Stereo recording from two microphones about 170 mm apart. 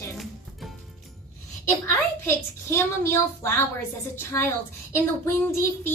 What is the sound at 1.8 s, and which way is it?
Speech, 15° left (ahead or behind).